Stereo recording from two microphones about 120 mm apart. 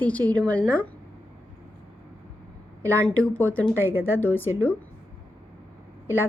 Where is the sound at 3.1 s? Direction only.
15° left (ahead or behind).